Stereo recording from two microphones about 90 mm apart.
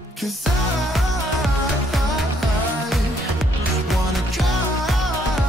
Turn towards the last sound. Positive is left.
turn(degrees=0)  # may be behind; listen again after turning